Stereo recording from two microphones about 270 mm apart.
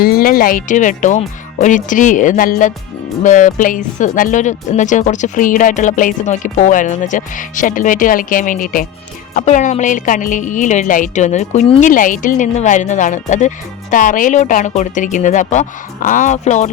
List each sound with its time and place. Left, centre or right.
0.0 s speech: left